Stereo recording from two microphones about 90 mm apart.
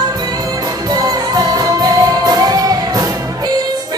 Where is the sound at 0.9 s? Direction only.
45° right (ahead or behind).